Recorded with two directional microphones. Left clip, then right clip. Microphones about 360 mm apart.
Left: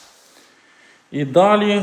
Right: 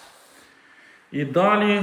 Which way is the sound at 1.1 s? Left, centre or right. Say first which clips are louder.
Left 5 dB; centre.